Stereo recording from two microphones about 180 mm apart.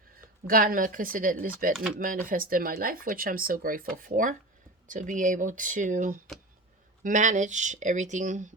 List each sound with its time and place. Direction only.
0.4 s speech: 50° right (ahead or behind)